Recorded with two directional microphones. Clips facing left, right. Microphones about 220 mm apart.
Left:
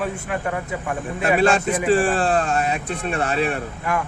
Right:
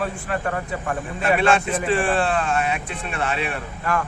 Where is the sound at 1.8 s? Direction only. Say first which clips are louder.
Left 4 dB; 40° left (ahead or behind).